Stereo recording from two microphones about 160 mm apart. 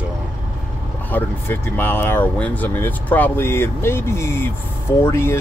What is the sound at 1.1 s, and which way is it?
Speech, 10° left (ahead or behind).